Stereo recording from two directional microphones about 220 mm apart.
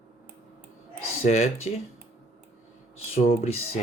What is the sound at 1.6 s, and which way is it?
Speech, 30° left (ahead or behind).